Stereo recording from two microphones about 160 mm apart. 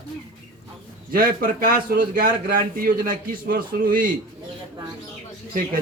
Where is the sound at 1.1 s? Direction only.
65° right (ahead or behind).